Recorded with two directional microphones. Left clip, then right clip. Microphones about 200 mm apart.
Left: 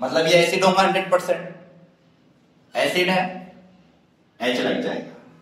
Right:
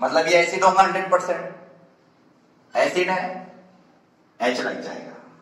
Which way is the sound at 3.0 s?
45° left (ahead or behind).